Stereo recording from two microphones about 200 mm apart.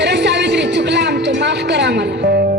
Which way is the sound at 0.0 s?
60° right (ahead or behind).